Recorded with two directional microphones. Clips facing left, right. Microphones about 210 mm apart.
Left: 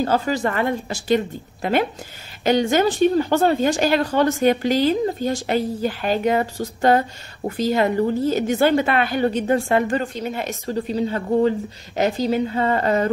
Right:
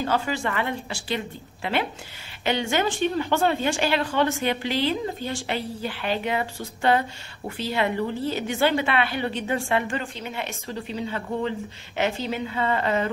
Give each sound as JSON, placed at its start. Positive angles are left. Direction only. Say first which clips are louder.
{"t": 0.0, "sound": "a woman's voice", "louder": "left 5 dB", "side_deg": 40}